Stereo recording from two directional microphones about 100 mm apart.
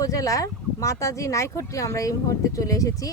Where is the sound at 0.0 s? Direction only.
35° left (ahead or behind).